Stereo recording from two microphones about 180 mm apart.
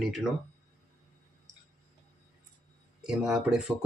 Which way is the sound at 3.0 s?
5° right (ahead or behind).